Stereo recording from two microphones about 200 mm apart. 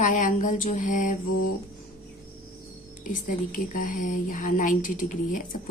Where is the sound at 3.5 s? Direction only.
45° left (ahead or behind).